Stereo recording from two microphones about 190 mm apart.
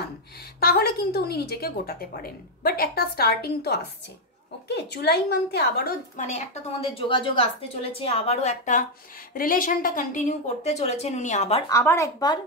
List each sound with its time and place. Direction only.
0.6 s a woman's voice: 55° left (ahead or behind)
6.1 s a woman's voice: 40° left (ahead or behind)
7.0 s a woman's voice: 25° left (ahead or behind)
11.7 s speech: 15° left (ahead or behind)